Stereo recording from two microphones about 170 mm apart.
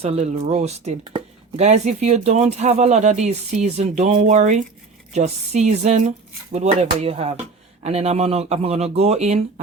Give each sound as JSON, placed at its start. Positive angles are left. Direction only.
{"t": 0.0, "sound": "speech", "side_deg": -40}